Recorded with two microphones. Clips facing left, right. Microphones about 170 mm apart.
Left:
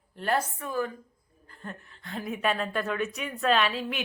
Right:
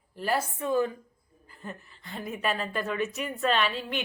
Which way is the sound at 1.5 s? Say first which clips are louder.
Right 1 dB; 5° right (ahead or behind).